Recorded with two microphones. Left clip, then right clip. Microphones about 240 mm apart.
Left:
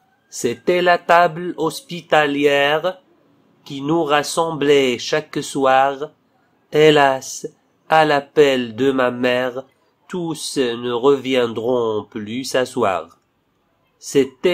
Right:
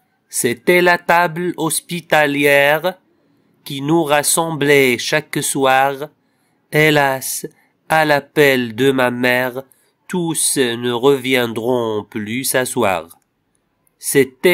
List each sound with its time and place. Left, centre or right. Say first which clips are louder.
0.3 s speech: right 4 dB; right